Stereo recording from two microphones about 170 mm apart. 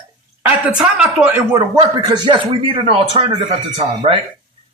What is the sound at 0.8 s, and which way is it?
Speech, 5° right (ahead or behind).